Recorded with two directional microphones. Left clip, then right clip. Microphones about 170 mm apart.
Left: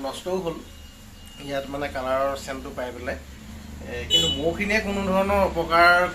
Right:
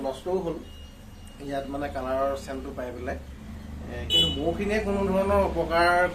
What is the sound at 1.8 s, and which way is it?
Speech, 30° left (ahead or behind).